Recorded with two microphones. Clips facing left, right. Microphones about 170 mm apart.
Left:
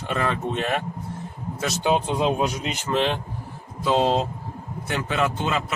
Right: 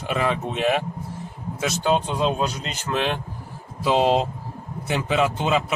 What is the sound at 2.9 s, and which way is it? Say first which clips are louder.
Speech: left 1 dB; centre (ahead or behind).